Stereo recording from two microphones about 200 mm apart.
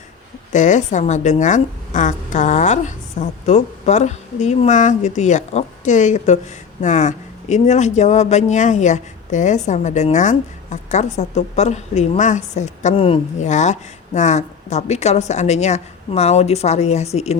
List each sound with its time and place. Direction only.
0.5 s speech: 35° left (ahead or behind)